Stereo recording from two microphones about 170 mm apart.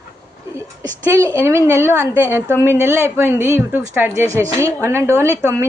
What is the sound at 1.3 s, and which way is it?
A woman's voice, 15° right (ahead or behind).